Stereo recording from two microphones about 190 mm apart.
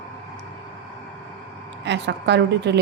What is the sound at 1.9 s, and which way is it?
Speech, 65° right (ahead or behind).